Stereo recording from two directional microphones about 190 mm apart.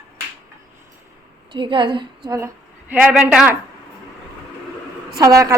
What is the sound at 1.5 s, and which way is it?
Speech, 25° right (ahead or behind).